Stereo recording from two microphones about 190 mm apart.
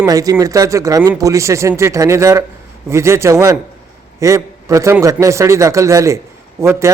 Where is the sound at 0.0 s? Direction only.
20° right (ahead or behind).